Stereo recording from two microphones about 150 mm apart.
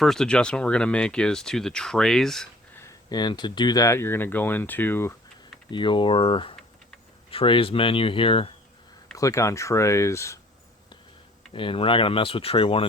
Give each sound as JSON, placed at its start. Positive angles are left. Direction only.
{"t": 0.0, "sound": "speech", "side_deg": 5}
{"t": 2.7, "sound": "speech", "side_deg": 20}
{"t": 5.7, "sound": "speech", "side_deg": 35}
{"t": 9.1, "sound": "speech", "side_deg": 20}
{"t": 11.5, "sound": "speech", "side_deg": 35}